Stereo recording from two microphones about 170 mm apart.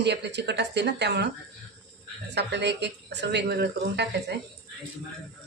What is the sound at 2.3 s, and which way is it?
Speech, 90° right.